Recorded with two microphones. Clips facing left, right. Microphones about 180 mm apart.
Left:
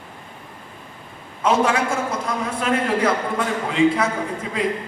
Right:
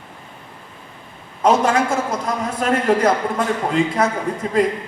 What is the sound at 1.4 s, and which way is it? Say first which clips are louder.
A man's voice: right 3 dB; 40° right (ahead or behind).